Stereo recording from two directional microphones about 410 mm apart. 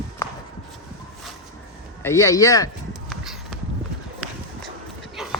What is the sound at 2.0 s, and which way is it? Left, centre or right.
Speech, centre.